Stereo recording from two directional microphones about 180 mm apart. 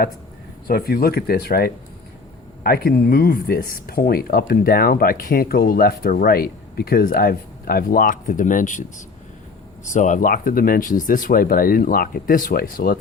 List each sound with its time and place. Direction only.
0.7 s speech: 55° left (ahead or behind)
9.8 s speech: 45° left (ahead or behind)